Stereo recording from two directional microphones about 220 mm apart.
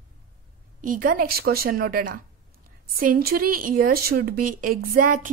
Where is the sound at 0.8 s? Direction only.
40° right (ahead or behind).